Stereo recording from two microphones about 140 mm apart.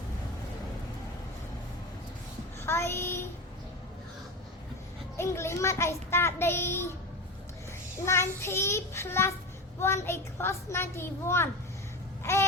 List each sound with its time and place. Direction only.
2.6 s child singing: 15° left (ahead or behind)
5.1 s a child's voice: 20° left (ahead or behind)
8.0 s a child's voice: 20° left (ahead or behind)
12.2 s baby cry: 20° left (ahead or behind)